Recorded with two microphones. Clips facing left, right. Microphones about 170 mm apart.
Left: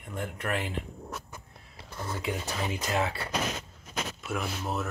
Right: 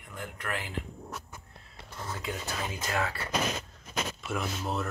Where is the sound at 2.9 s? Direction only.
20° left (ahead or behind).